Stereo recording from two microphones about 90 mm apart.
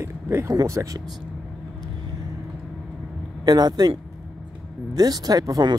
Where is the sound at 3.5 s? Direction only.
45° right (ahead or behind).